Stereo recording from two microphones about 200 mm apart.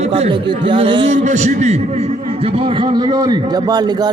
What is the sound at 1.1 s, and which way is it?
A man's voice, 35° right (ahead or behind).